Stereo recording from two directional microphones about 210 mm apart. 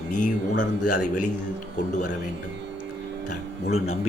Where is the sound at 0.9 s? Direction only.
90° left.